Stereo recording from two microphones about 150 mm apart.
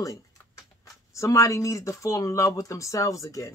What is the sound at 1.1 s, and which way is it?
Speech, 20° left (ahead or behind).